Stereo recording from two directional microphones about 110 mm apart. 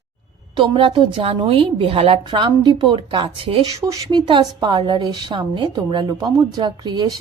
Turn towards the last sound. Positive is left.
turn(degrees=-40)  # may be behind; listen again after turning